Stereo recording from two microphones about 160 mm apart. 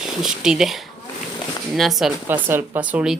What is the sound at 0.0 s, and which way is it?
Speech, centre (ahead or behind).